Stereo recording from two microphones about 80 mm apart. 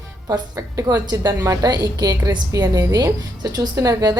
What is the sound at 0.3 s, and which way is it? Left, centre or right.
A woman's voice, right.